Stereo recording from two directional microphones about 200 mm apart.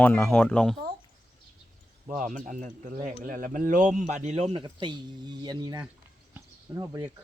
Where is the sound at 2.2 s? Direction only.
40° right (ahead or behind); by 5.8 s 20° right (ahead or behind).